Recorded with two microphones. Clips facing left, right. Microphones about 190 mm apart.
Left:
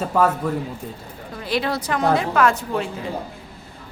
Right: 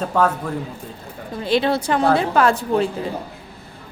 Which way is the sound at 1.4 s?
25° right (ahead or behind).